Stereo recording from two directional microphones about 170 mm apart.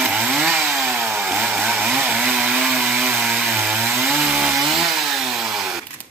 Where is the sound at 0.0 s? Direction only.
10° right (ahead or behind).